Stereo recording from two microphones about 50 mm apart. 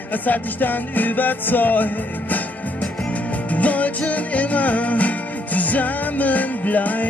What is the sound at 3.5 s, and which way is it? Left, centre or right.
Music, left.